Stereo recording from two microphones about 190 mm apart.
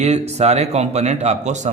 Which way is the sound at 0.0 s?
35° right (ahead or behind).